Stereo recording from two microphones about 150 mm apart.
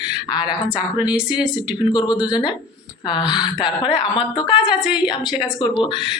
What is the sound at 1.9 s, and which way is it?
A woman's voice, 30° left (ahead or behind).